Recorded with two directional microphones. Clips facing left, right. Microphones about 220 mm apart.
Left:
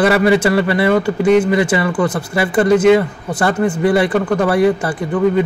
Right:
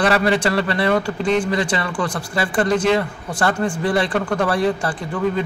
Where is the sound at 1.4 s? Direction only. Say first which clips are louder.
Left 6 dB; 20° left (ahead or behind).